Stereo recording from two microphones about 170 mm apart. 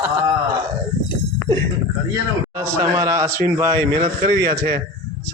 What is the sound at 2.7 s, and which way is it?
A man's voice, 20° right (ahead or behind).